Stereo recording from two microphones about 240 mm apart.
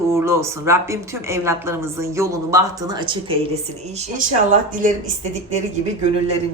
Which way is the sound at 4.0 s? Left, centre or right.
Right.